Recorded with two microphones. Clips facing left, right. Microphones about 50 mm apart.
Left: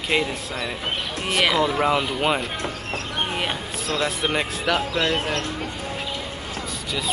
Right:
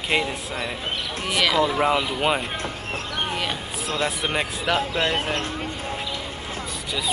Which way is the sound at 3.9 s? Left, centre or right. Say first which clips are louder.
Left 1 dB; right.